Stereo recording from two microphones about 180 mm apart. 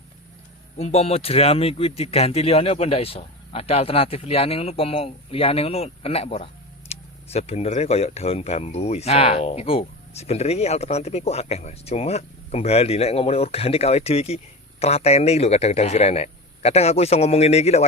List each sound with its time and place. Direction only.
0.8 s speech: 40° left (ahead or behind)